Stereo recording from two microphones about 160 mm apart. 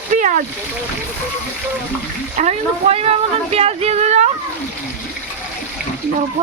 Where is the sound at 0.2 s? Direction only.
55° right (ahead or behind).